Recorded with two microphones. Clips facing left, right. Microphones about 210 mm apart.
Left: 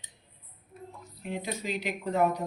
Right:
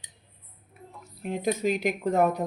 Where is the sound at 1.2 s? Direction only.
50° right (ahead or behind).